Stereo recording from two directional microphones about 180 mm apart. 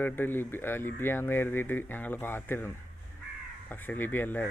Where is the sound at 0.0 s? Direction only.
10° left (ahead or behind).